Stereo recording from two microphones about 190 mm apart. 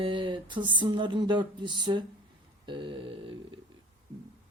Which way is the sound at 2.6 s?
25° right (ahead or behind).